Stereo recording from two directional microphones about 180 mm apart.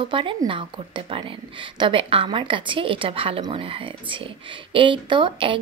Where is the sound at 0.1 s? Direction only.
30° right (ahead or behind).